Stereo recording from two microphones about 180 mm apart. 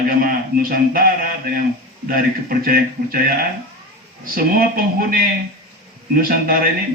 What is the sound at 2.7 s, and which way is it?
A man's voice, 55° right (ahead or behind).